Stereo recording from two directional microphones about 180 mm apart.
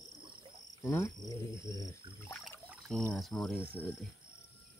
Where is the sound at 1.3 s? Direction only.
20° left (ahead or behind).